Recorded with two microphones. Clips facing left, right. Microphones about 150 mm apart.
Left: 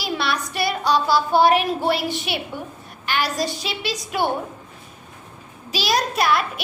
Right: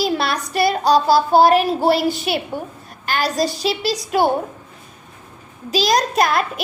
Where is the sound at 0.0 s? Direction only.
40° right (ahead or behind).